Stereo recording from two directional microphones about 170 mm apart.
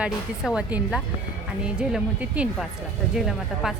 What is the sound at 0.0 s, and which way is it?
Speech, 5° right (ahead or behind).